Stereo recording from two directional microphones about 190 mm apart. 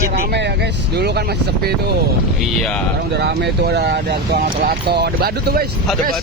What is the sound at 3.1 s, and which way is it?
Speech, 60° right (ahead or behind).